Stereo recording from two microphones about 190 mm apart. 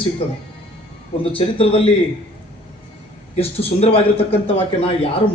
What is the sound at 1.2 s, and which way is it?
Speech, 30° left (ahead or behind).